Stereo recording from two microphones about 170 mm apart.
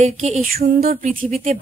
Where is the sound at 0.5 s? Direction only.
60° right (ahead or behind).